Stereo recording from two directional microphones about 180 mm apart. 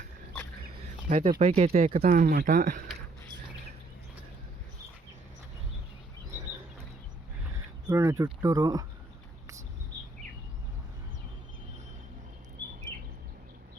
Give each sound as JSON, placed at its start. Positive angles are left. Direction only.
{"t": 1.1, "sound": "speech", "side_deg": -40}
{"t": 2.0, "sound": "speech", "side_deg": -55}
{"t": 7.5, "sound": "a sound", "side_deg": -20}
{"t": 8.2, "sound": "speech", "side_deg": -20}